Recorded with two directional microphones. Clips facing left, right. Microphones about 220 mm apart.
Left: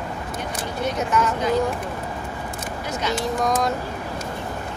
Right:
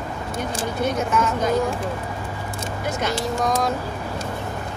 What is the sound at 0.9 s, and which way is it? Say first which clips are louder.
Speech: even; centre (ahead or behind).